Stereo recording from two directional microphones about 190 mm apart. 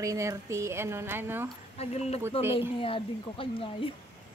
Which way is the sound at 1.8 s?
35° left (ahead or behind).